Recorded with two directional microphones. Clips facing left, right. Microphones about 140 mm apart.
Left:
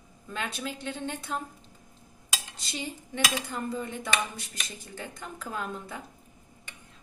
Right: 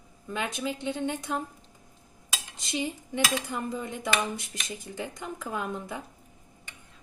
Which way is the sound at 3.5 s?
15° right (ahead or behind).